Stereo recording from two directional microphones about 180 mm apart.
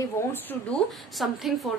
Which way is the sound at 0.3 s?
10° left (ahead or behind).